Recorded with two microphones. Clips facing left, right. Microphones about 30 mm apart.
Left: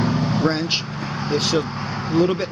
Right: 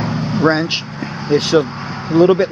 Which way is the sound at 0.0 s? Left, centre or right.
Centre.